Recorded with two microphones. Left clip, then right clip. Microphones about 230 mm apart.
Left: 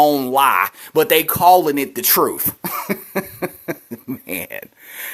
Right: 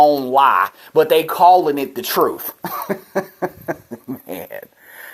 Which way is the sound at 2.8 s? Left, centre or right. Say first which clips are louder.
Right 2 dB; left.